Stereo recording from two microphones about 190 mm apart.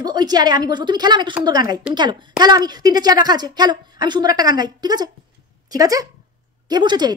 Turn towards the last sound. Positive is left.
turn(degrees=-20)  # may be behind; listen again after turning